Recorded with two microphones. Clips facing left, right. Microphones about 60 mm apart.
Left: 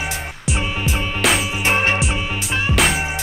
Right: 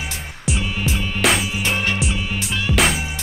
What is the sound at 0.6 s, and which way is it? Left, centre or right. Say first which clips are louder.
Music: left 3 dB; centre.